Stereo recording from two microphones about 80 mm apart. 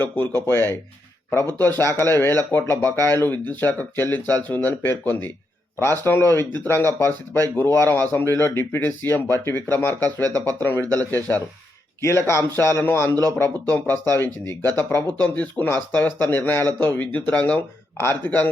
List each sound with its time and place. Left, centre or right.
0.0 s speech: left
12.0 s a man's voice: left; by 17.6 s centre
17.9 s speech: left